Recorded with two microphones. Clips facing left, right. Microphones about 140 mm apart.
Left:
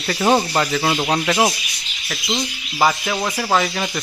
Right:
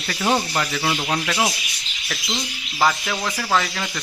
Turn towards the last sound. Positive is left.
turn(degrees=20)  # may be behind; listen again after turning